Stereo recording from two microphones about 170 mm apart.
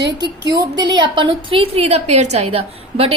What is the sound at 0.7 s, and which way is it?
A woman's voice, 25° right (ahead or behind).